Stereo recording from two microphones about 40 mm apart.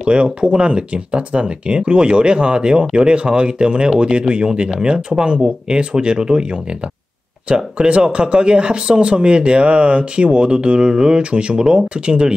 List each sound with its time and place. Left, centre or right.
0.0 s speech: right